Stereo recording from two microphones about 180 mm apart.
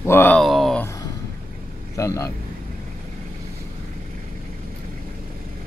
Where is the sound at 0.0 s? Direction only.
10° left (ahead or behind).